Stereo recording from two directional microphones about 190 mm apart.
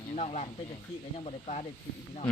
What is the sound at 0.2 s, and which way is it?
Speech, 35° left (ahead or behind).